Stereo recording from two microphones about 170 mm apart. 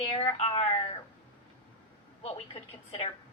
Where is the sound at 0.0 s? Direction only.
35° left (ahead or behind).